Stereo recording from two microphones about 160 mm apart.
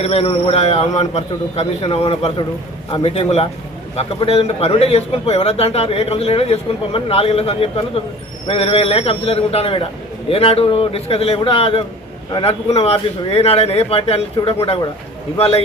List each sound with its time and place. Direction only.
0.0 s a man's voice: 35° left (ahead or behind)